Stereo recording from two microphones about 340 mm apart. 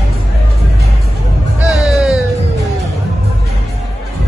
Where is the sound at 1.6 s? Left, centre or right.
Centre.